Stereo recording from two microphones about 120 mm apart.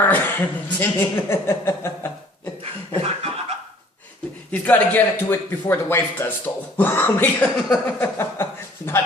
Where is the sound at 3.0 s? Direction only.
60° right (ahead or behind).